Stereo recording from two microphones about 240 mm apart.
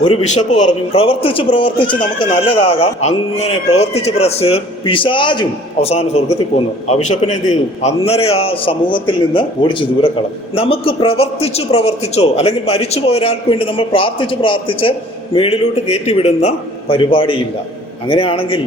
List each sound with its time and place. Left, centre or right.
0.0 s speech: left